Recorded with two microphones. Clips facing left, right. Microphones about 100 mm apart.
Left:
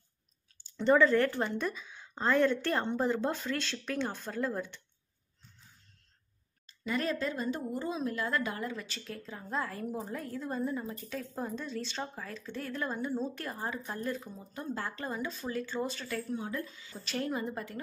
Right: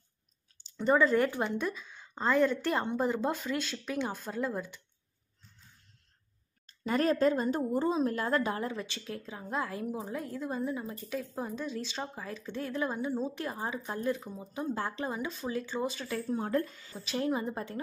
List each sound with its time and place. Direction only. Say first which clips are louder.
0.7 s speech: left 1 dB; 10° right (ahead or behind)
1.6 s a woman's voice: right 1 dB; centre (ahead or behind)
6.8 s a woman's voice: right 6 dB; 40° right (ahead or behind)
8.5 s a woman's voice: right 3 dB; 25° right (ahead or behind)
16.3 s a woman's voice: right 6 dB; 55° right (ahead or behind)
17.2 s a woman's voice: right 3 dB; 20° right (ahead or behind)